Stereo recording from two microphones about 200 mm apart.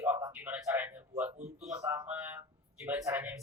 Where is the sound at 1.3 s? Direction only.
30° right (ahead or behind).